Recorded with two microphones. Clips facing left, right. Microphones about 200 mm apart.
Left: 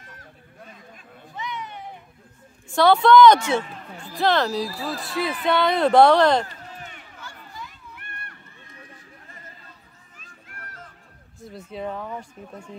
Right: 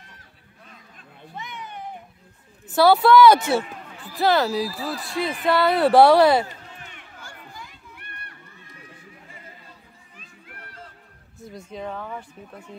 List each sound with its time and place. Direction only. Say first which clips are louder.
1.3 s a sound: left 3 dB; 50° right (ahead or behind)
2.7 s a woman's voice: even; 5° right (ahead or behind)
11.4 s speech: left 2 dB; 5° left (ahead or behind)